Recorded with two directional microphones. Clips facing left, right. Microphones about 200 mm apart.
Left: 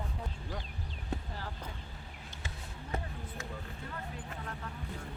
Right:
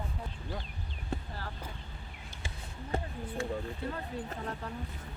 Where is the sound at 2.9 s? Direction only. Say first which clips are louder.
Right 4 dB; 30° right (ahead or behind).